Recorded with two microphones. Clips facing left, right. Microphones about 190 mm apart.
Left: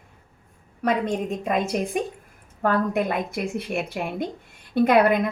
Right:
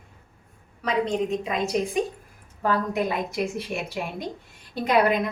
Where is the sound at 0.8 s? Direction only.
50° left (ahead or behind).